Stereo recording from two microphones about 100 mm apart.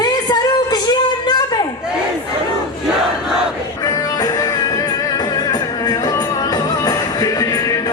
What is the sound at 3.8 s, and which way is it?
Music, 40° left (ahead or behind).